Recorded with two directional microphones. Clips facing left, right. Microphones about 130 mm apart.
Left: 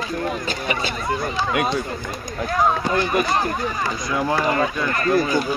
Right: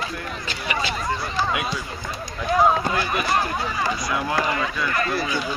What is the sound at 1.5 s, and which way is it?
Speech, 55° left (ahead or behind).